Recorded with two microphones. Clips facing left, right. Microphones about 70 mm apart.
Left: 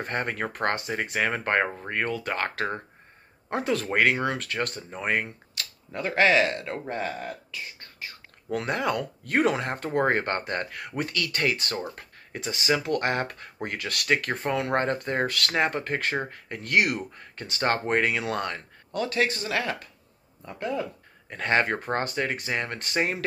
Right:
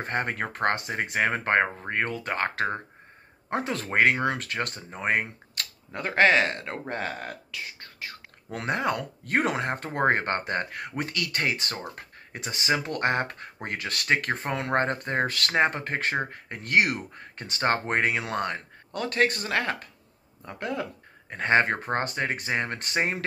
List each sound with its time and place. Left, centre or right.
0.0 s speech: centre
5.6 s camera: right
5.9 s a man's voice: right
6.9 s speech: right
8.5 s speech: right
18.9 s speech: right
20.4 s speech: right
21.3 s speech: right